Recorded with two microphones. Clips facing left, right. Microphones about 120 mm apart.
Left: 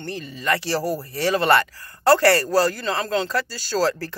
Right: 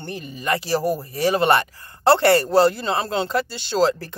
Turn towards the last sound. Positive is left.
turn(degrees=-20)  # may be behind; listen again after turning